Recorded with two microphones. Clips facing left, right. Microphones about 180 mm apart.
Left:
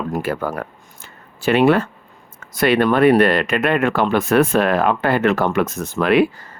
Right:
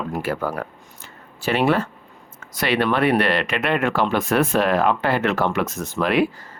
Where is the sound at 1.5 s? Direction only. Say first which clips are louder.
Left 5 dB; 60° left (ahead or behind).